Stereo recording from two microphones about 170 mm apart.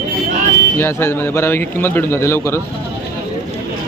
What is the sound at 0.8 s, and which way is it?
Speech, 15° left (ahead or behind).